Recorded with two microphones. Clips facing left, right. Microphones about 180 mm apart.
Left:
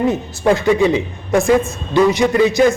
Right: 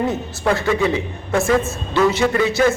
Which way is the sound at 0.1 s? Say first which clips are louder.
Left 4 dB; 15° left (ahead or behind).